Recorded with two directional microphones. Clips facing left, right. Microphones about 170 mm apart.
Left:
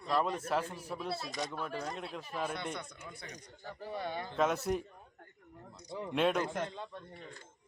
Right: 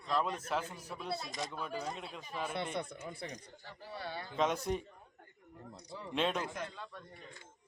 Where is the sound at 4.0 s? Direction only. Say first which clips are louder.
Left 4 dB; 20° left (ahead or behind).